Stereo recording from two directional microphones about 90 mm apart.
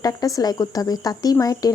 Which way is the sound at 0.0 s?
40° left (ahead or behind).